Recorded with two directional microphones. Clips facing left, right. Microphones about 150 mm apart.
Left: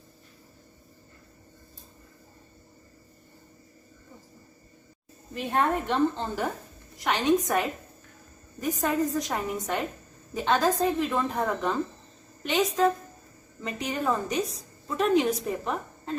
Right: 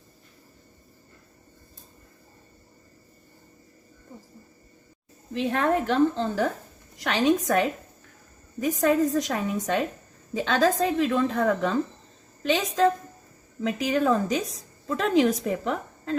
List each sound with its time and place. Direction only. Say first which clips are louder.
5.3 s a woman's voice: right 2 dB; 90° right